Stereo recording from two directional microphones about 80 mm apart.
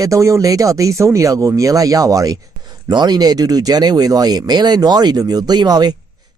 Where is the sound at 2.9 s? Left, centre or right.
Right.